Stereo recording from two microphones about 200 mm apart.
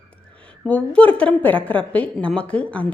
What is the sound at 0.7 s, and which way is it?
A woman's voice, 5° left (ahead or behind).